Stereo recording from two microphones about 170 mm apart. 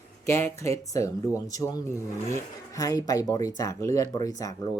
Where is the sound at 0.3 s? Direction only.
15° left (ahead or behind).